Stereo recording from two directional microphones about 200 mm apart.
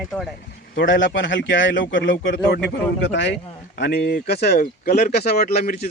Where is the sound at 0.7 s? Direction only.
65° left (ahead or behind).